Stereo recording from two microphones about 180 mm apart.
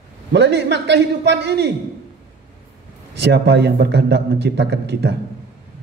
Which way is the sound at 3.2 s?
70° right (ahead or behind).